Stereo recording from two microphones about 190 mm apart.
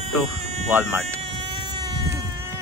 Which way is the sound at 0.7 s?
15° right (ahead or behind).